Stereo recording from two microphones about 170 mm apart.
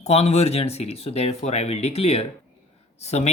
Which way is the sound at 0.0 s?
40° left (ahead or behind).